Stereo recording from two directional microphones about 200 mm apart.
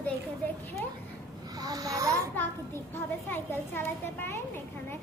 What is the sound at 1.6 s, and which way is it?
Speech, 20° right (ahead or behind).